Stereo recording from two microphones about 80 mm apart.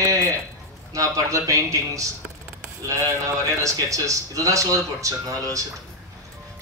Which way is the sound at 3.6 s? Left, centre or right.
Right.